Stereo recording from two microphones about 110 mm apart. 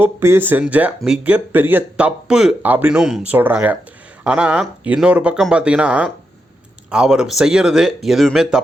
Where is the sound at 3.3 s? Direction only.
15° right (ahead or behind).